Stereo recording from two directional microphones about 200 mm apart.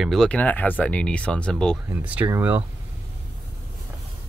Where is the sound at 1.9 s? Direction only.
10° right (ahead or behind).